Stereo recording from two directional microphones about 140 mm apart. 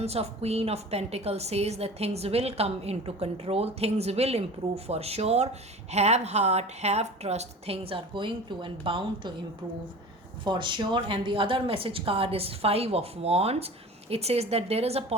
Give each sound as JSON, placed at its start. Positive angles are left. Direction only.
{"t": 0.0, "sound": "a woman's voice", "side_deg": -50}
{"t": 10.4, "sound": "a woman's voice", "side_deg": -35}